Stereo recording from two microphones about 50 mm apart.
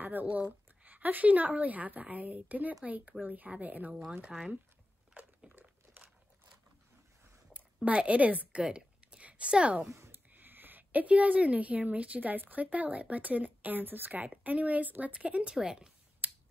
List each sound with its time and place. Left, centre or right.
0.0 s a woman's voice: right
4.3 s speech: centre
7.5 s a woman's voice: right
10.3 s a woman's voice: right
15.5 s speech: centre